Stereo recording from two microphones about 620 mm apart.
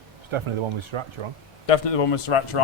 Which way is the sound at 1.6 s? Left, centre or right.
Left.